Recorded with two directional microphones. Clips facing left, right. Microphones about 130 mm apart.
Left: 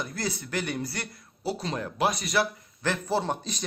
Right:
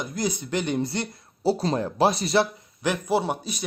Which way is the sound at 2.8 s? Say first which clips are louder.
Right 4 dB; 15° right (ahead or behind).